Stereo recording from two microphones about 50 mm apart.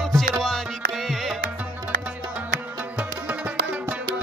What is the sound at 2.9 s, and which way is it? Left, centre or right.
Music, right.